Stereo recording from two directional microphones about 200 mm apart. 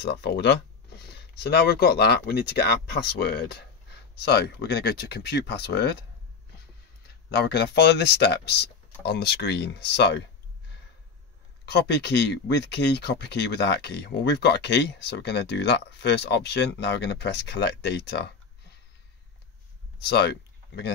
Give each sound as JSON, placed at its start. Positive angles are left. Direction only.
{"t": 0.0, "sound": "speech", "side_deg": 60}
{"t": 7.4, "sound": "speech", "side_deg": 55}
{"t": 11.6, "sound": "speech", "side_deg": 55}
{"t": 20.0, "sound": "speech", "side_deg": 55}